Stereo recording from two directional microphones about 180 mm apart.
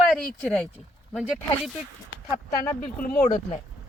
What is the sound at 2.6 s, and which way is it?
Speech, 50° left (ahead or behind).